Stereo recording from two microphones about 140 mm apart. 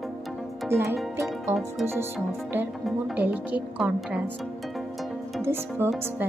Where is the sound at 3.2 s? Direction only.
10° right (ahead or behind).